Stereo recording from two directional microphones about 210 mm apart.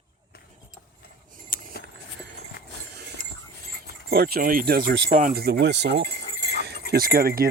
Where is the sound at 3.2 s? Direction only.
40° left (ahead or behind).